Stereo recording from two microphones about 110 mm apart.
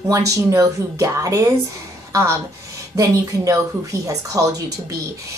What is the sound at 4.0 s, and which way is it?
Speech, 30° right (ahead or behind).